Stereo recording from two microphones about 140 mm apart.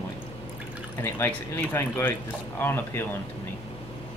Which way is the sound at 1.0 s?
15° left (ahead or behind).